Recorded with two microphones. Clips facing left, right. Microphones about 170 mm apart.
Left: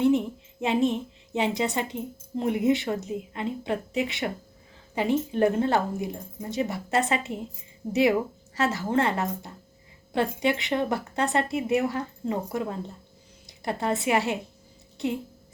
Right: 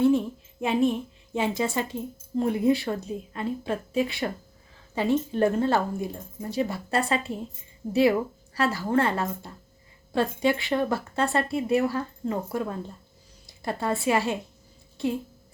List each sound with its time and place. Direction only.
0.0 s a woman's voice: 20° left (ahead or behind)
8.5 s a woman's voice: 20° left (ahead or behind)